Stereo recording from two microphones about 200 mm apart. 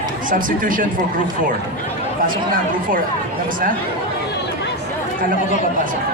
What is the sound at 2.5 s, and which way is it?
Speech, 45° right (ahead or behind).